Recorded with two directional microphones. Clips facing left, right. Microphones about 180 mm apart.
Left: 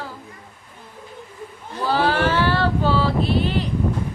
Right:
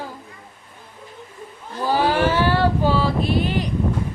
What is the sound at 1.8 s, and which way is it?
Female singing, 15° right (ahead or behind).